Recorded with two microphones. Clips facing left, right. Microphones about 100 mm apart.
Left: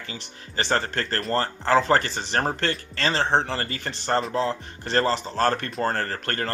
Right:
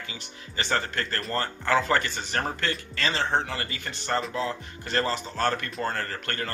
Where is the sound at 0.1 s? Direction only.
35° left (ahead or behind).